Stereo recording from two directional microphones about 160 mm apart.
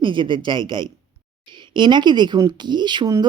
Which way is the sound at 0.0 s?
30° right (ahead or behind).